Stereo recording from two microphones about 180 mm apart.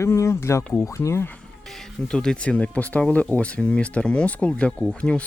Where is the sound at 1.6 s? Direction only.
Centre (ahead or behind).